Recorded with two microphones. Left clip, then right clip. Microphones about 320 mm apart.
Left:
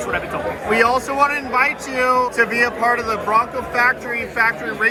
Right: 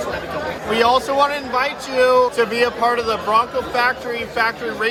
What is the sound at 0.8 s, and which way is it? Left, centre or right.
A man's voice, centre.